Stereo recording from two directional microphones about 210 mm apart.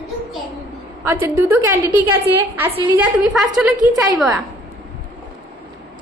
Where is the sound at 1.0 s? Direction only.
10° right (ahead or behind).